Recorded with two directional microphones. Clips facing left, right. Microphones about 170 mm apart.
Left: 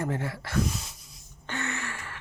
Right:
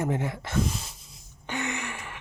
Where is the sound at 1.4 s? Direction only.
15° right (ahead or behind).